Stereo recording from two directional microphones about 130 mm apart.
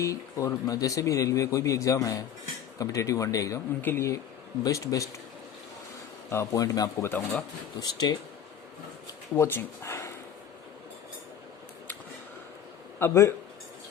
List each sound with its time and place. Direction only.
0.0 s a man's voice: 25° left (ahead or behind)
6.3 s a man's voice: 25° left (ahead or behind)
9.3 s speech: 15° left (ahead or behind)
13.0 s a man's voice: 20° left (ahead or behind)